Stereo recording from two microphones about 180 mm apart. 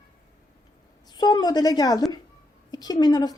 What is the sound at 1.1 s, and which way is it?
Speech, 25° left (ahead or behind).